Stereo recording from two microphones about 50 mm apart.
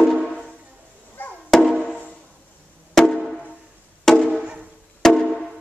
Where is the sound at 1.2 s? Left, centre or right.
Left.